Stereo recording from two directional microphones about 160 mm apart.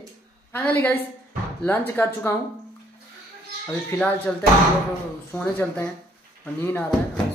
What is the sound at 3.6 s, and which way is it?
Speech, 10° left (ahead or behind).